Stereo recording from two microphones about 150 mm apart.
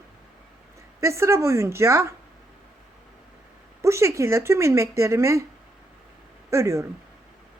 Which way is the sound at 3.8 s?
20° right (ahead or behind).